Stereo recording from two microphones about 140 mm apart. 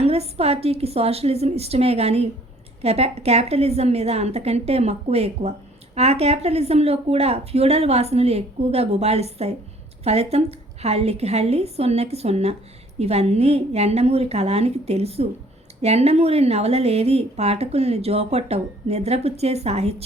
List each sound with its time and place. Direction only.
0.0 s a woman's voice: 45° right (ahead or behind)